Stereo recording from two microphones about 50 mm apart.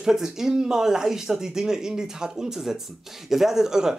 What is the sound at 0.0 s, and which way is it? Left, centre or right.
Speech, centre.